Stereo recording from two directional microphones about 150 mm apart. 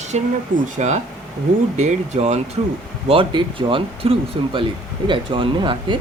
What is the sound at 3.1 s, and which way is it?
Speech, 35° right (ahead or behind).